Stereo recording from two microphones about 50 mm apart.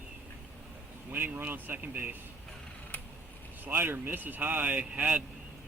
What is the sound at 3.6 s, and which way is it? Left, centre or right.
Speech, right.